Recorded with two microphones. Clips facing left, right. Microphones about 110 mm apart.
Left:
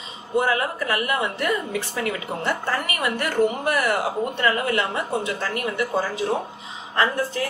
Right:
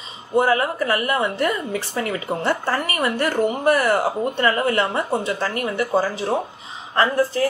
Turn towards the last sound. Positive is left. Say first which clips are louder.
# right 4 dB
turn(degrees=-35)  # may be behind; listen again after turning